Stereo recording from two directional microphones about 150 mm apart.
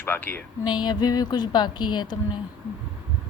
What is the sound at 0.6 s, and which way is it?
A woman's voice, 30° left (ahead or behind).